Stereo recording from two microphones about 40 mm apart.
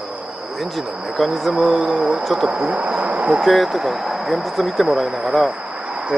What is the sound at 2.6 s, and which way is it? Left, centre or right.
Speech, right.